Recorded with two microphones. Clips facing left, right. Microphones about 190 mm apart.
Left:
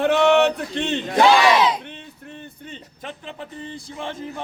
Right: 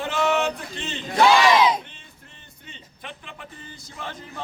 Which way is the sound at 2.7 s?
35° left (ahead or behind).